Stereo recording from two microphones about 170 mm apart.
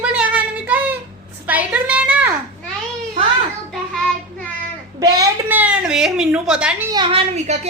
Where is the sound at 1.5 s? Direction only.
10° right (ahead or behind).